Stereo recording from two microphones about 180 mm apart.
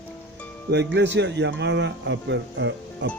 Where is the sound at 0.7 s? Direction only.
75° right (ahead or behind).